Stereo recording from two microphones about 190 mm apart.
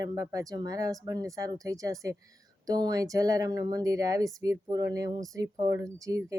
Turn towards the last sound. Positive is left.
turn(degrees=-15)  # may be behind; listen again after turning